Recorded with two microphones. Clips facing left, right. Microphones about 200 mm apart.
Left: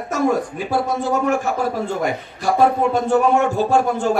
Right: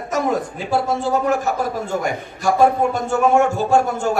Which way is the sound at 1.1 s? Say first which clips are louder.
Even; 40° right (ahead or behind).